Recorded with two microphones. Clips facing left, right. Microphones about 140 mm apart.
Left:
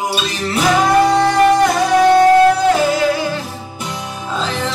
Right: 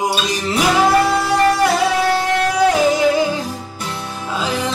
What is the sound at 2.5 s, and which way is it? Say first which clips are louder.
Music: even; 20° right (ahead or behind).